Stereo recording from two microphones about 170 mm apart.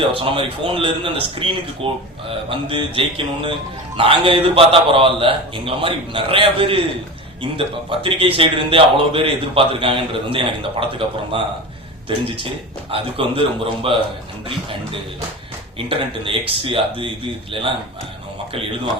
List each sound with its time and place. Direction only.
0.0 s a man's voice: 30° right (ahead or behind)
15.9 s a man's voice: 30° right (ahead or behind)